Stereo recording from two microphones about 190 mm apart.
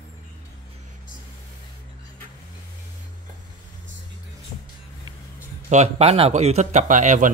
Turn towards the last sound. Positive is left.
turn(degrees=-40)  # may be behind; listen again after turning